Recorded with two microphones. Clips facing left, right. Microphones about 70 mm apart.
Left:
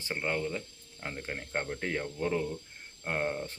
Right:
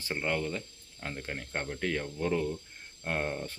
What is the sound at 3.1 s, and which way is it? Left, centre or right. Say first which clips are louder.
Speech: left 1 dB; centre.